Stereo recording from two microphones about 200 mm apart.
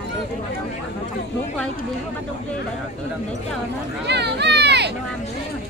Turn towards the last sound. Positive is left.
turn(degrees=-55)  # may be behind; listen again after turning